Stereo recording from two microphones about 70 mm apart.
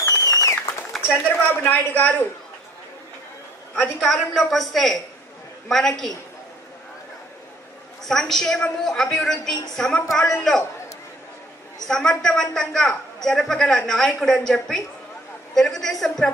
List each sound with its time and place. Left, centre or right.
0.0 s a sound: left
1.2 s speech: left
3.8 s a woman's voice: centre
8.0 s a woman's voice: centre
11.9 s a woman's voice: centre